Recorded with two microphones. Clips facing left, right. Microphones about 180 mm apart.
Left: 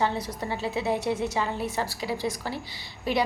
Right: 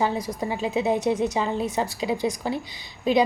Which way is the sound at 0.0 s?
10° right (ahead or behind).